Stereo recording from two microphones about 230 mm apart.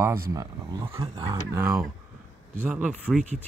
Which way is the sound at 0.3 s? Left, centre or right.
Centre.